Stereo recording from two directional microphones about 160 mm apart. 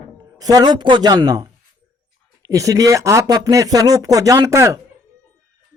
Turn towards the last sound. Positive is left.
turn(degrees=-20)  # may be behind; listen again after turning